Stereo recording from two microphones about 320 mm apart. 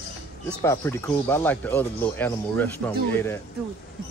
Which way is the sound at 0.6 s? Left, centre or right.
Centre.